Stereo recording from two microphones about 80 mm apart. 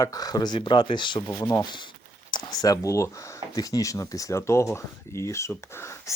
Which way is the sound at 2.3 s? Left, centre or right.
Left.